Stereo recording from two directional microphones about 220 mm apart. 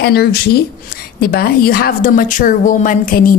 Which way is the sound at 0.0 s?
45° left (ahead or behind).